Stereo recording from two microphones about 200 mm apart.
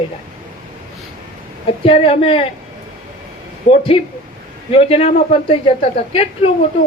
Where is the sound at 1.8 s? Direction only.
30° left (ahead or behind).